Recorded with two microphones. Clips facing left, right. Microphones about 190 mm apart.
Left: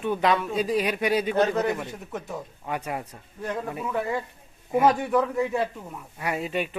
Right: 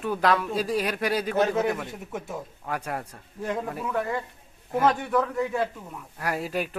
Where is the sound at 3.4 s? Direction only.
10° right (ahead or behind).